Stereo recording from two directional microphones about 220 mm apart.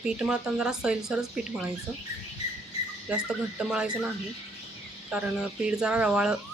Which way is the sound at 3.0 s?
5° right (ahead or behind).